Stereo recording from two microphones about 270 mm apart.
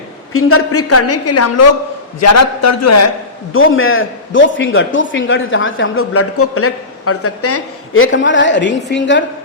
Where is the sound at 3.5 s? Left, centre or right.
Left.